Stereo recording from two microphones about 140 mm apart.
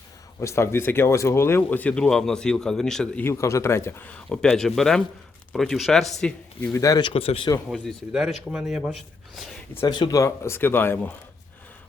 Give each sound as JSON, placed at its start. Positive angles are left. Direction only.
{"t": 0.3, "sound": "speech", "side_deg": 20}
{"t": 3.2, "sound": "speech", "side_deg": 20}
{"t": 4.3, "sound": "speech", "side_deg": 5}
{"t": 6.7, "sound": "speech", "side_deg": 25}
{"t": 7.1, "sound": "speech", "side_deg": 40}
{"t": 7.7, "sound": "speech", "side_deg": 0}
{"t": 9.8, "sound": "speech", "side_deg": 30}